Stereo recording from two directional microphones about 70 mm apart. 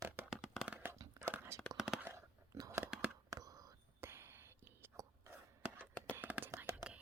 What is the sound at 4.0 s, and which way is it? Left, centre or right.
Whispering, right.